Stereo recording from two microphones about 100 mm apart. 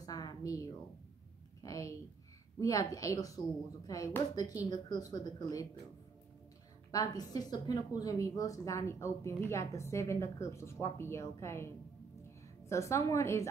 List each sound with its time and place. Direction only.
0.0 s a sound: 40° left (ahead or behind)
1.6 s a woman's voice: 35° left (ahead or behind)
6.9 s a woman's voice: 40° left (ahead or behind)